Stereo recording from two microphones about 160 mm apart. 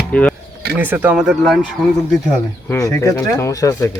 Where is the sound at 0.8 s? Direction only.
10° right (ahead or behind).